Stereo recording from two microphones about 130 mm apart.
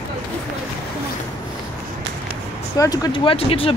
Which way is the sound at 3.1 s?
45° left (ahead or behind).